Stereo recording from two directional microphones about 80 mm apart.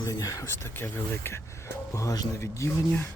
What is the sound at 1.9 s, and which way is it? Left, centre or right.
Speech, left.